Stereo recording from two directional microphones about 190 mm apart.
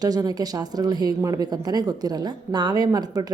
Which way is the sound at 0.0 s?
20° right (ahead or behind).